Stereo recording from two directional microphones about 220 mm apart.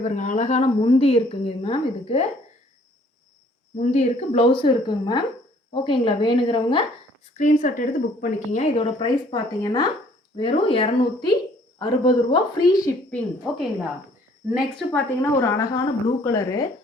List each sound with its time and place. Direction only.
0.0 s a woman's voice: 35° left (ahead or behind)
3.8 s a woman's voice: 30° left (ahead or behind)
7.3 s a woman's voice: 35° left (ahead or behind); by 16.6 s 15° left (ahead or behind)